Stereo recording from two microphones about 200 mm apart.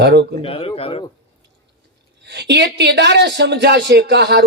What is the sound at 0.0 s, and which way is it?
Speech, 60° right (ahead or behind).